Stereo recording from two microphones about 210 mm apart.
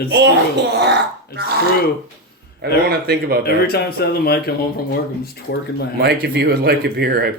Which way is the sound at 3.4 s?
50° left (ahead or behind).